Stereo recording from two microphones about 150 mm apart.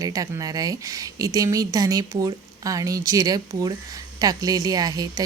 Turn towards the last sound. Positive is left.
turn(degrees=-25)  # may be behind; listen again after turning